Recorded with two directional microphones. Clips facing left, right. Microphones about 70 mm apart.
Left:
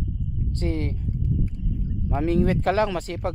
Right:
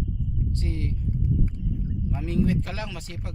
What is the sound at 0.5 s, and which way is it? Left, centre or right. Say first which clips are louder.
Speech: left 5 dB; left.